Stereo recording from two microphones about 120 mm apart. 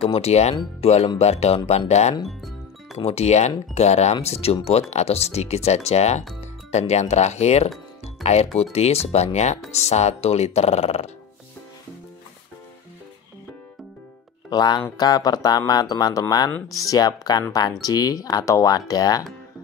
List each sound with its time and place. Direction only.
0.0 s speech: 60° left (ahead or behind)
2.2 s music: centre (ahead or behind)
3.0 s speech: 60° left (ahead or behind)
8.0 s music: 60° left (ahead or behind)
8.7 s speech: 60° left (ahead or behind)
14.5 s speech: 35° left (ahead or behind)